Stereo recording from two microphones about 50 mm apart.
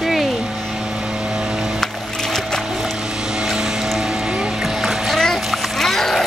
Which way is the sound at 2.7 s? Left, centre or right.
Centre.